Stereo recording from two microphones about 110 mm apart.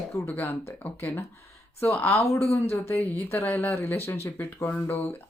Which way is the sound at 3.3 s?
20° left (ahead or behind).